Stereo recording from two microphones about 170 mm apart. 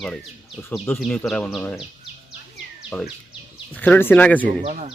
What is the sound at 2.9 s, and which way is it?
A man's voice, 5° left (ahead or behind).